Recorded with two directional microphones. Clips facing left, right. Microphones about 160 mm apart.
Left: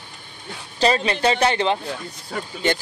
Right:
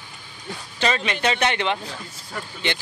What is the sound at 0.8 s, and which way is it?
Speech, 35° left (ahead or behind).